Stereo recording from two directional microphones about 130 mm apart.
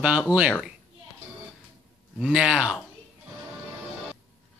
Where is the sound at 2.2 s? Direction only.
5° right (ahead or behind).